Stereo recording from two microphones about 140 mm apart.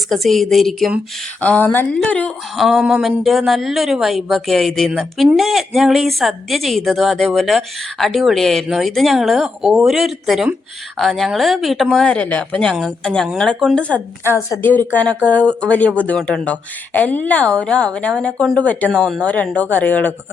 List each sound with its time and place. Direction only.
0.1 s speech: centre (ahead or behind)